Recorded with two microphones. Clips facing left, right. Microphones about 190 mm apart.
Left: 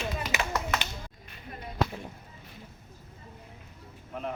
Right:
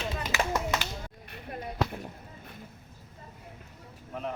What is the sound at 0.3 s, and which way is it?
Clapping, 20° left (ahead or behind).